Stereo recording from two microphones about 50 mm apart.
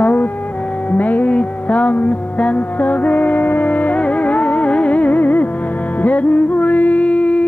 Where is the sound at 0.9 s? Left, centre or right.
Left.